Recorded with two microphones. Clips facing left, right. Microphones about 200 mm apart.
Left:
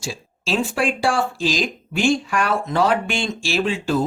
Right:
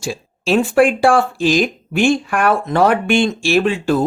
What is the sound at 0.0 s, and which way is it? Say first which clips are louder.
Speech: right 7 dB; 55° right (ahead or behind).